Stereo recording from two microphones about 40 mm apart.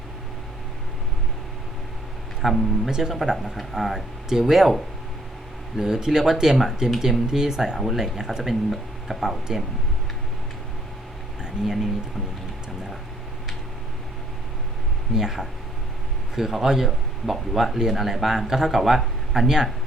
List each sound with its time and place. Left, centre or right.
2.4 s speech: centre
11.6 s speech: centre
15.1 s speech: centre
19.3 s speech: centre